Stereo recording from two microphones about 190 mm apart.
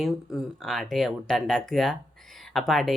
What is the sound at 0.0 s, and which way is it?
Speech, centre (ahead or behind).